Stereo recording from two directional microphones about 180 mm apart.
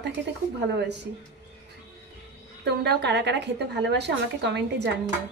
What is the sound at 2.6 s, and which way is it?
A woman's voice, 70° right (ahead or behind).